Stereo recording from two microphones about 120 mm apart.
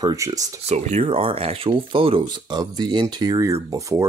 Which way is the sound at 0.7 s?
60° right (ahead or behind).